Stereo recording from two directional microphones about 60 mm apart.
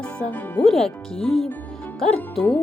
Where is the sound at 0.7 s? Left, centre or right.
Centre.